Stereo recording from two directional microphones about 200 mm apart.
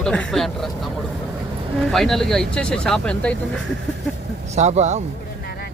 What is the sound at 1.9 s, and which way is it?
Speech, centre (ahead or behind).